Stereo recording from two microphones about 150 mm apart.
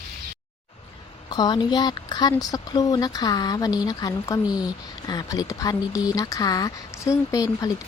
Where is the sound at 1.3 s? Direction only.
25° left (ahead or behind).